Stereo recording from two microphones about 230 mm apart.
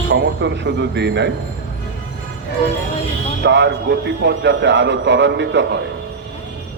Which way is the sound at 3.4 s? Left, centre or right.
Right.